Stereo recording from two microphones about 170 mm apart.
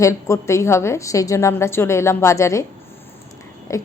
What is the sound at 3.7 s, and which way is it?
Speech, 15° left (ahead or behind).